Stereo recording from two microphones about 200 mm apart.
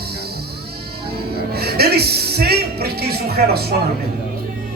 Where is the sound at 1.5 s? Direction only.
50° right (ahead or behind).